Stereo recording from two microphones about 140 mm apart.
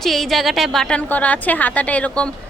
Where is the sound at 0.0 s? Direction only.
Centre (ahead or behind).